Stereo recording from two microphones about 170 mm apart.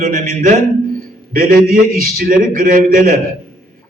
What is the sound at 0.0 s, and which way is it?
A man's voice, 55° right (ahead or behind).